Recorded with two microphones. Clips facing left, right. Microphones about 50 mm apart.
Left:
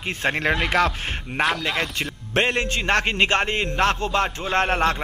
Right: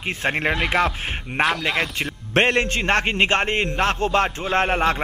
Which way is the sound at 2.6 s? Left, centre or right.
Right.